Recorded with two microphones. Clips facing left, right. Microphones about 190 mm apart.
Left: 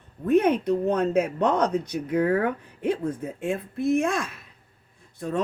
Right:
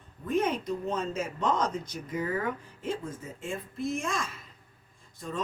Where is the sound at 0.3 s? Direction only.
65° left (ahead or behind).